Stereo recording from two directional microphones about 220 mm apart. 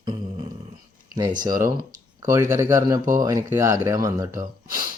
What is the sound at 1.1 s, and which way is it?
Speech, 20° right (ahead or behind).